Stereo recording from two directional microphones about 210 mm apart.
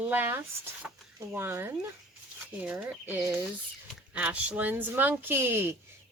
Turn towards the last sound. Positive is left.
turn(degrees=-10)  # may be behind; listen again after turning